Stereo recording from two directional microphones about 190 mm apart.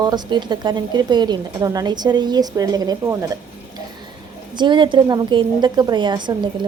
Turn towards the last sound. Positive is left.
turn(degrees=-25)  # may be behind; listen again after turning